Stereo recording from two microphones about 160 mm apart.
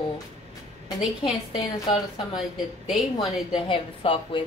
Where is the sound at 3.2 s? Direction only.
30° left (ahead or behind).